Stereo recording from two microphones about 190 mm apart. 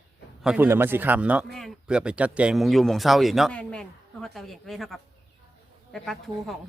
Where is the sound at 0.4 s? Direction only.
10° right (ahead or behind).